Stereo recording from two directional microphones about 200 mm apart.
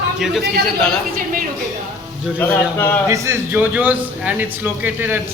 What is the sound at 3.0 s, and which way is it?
A man's voice, 15° right (ahead or behind).